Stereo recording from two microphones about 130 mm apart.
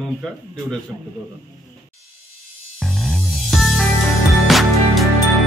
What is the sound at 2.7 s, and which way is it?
Music, centre (ahead or behind).